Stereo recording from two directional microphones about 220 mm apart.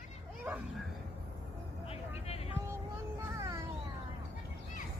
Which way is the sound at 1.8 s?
25° left (ahead or behind).